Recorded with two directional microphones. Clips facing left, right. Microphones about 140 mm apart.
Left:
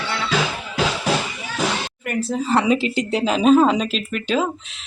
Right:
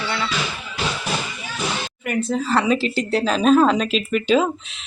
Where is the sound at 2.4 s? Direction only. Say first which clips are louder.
Left 3 dB; 20° left (ahead or behind).